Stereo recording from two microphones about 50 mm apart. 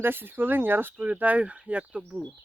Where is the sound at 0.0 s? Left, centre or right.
Right.